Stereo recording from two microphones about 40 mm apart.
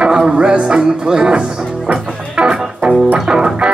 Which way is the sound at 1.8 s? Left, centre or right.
Right.